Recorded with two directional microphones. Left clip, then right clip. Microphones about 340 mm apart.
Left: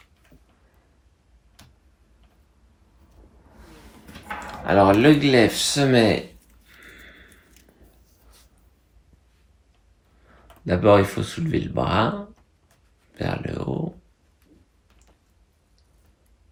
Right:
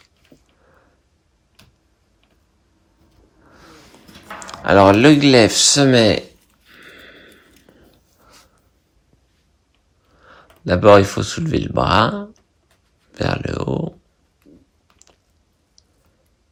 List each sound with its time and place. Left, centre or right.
4.4 s speech: centre
10.7 s speech: centre